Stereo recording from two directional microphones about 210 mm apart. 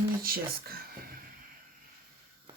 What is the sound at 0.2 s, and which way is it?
Speech, 45° right (ahead or behind).